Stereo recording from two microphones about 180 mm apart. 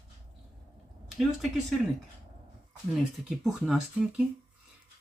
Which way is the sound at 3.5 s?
Centre (ahead or behind).